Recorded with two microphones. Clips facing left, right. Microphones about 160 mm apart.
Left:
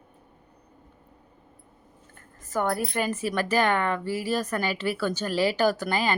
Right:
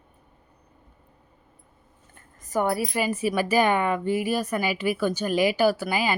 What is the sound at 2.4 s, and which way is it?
A woman's voice, 10° right (ahead or behind).